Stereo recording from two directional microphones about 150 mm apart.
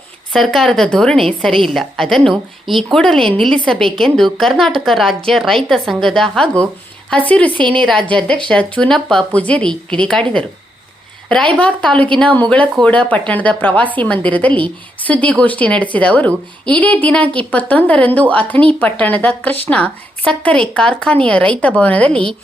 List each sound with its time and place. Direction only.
0.3 s speech: centre (ahead or behind)
7.5 s speech: 35° right (ahead or behind)
7.8 s speech: 5° left (ahead or behind)
11.5 s speech: 10° left (ahead or behind)